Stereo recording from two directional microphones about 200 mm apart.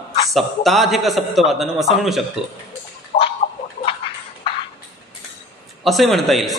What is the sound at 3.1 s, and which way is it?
Tick-tock, 35° left (ahead or behind).